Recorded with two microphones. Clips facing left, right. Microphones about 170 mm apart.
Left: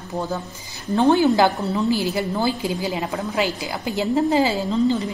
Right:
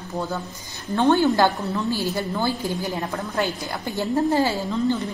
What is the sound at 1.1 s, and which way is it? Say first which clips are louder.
A woman's voice: left 1 dB; 15° left (ahead or behind).